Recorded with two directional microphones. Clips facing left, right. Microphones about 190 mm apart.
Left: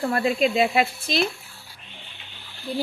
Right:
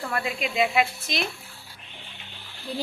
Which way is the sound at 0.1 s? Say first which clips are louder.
Left 8 dB; 35° left (ahead or behind).